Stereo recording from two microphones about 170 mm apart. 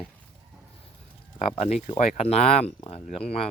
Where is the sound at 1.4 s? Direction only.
40° left (ahead or behind).